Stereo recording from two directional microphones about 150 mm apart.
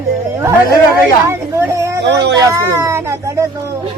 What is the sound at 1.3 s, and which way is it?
Speech, 20° right (ahead or behind).